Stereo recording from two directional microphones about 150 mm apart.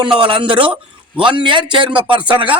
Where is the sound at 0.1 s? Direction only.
35° right (ahead or behind).